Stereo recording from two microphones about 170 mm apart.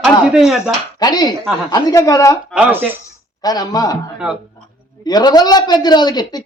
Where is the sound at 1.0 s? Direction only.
25° left (ahead or behind).